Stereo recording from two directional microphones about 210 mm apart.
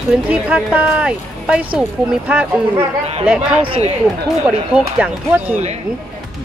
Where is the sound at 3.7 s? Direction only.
30° right (ahead or behind).